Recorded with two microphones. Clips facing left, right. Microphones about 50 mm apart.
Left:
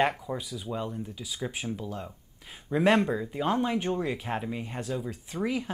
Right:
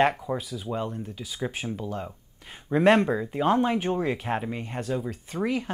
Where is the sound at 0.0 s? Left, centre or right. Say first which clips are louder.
Right 4 dB; centre.